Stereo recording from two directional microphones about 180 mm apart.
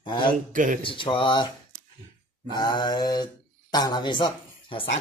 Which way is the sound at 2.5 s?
25° left (ahead or behind).